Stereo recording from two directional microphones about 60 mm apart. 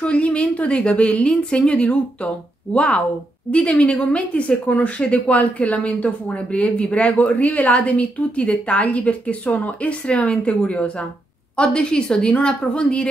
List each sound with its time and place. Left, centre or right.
0.0 s a woman's voice: centre